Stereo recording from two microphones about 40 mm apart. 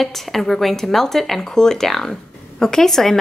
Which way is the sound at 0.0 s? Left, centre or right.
Centre.